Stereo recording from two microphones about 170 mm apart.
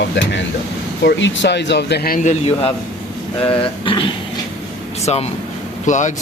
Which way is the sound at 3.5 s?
30° left (ahead or behind).